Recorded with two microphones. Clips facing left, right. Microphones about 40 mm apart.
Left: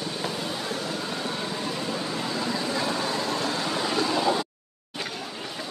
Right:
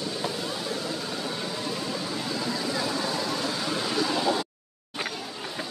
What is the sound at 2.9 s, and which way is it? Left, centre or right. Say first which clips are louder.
Vehicle: left 1 dB; left.